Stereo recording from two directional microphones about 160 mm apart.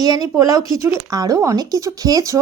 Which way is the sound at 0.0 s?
25° right (ahead or behind).